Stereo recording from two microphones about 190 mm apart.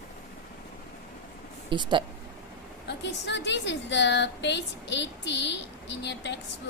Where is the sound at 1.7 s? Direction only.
25° right (ahead or behind).